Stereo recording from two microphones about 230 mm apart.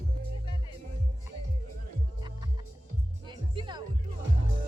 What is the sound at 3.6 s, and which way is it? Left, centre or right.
Music, centre.